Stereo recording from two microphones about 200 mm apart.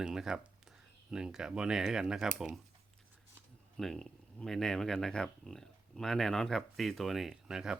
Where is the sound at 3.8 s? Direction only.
Centre (ahead or behind).